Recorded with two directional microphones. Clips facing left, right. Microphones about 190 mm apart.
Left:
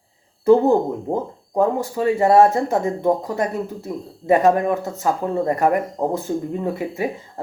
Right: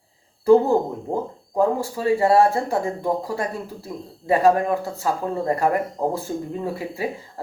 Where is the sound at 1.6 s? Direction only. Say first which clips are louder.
Left 2 dB; 20° left (ahead or behind).